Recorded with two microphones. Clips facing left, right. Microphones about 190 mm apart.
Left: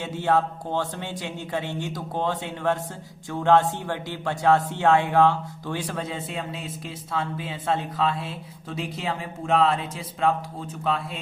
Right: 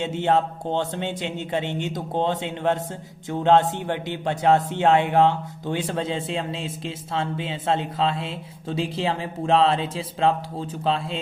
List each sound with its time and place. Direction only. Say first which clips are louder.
0.0 s speech: right 2 dB; 25° right (ahead or behind)